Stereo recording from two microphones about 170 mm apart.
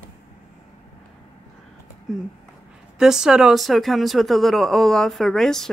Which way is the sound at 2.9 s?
5° right (ahead or behind).